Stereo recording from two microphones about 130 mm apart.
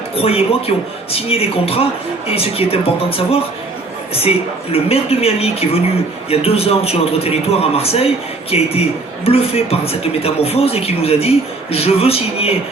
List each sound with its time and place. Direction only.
0.2 s a man's voice: 50° left (ahead or behind)
4.7 s a man's voice: 50° left (ahead or behind)